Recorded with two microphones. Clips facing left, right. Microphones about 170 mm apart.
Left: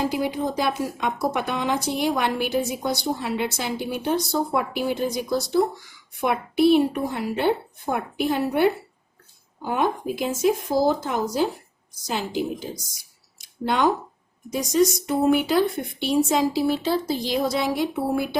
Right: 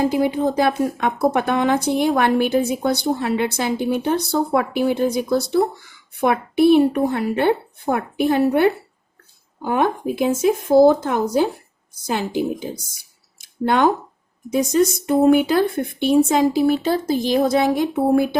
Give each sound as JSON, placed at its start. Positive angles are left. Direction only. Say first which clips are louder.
{"t": 0.2, "sound": "a woman's voice", "louder": "right 6 dB", "side_deg": -55}
{"t": 13.4, "sound": "a sound", "louder": "right 4 dB", "side_deg": -55}
{"t": 14.5, "sound": "speech", "louder": "right 3 dB", "side_deg": -55}